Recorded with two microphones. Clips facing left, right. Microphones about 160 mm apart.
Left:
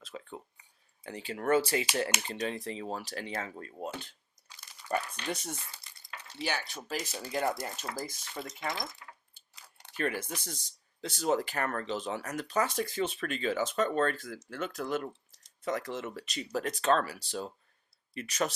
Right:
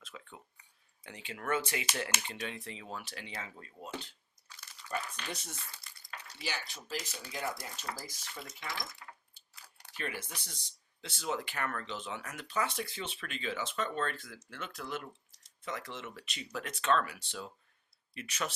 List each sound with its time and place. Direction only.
0.0 s a sound: 35° left (ahead or behind)
1.0 s speech: 35° left (ahead or behind)
4.9 s speech: 55° left (ahead or behind)
9.6 s chewing: 25° left (ahead or behind)
10.0 s speech: 45° left (ahead or behind)